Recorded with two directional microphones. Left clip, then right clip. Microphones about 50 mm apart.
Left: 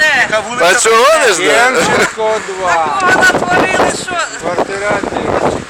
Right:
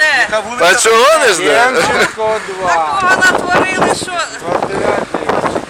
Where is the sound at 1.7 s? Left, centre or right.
Centre.